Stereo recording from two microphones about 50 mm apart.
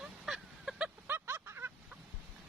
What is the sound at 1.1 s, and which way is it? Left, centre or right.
Vehicle, right.